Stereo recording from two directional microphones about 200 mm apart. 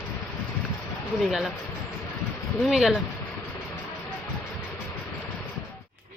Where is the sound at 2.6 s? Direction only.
Centre (ahead or behind).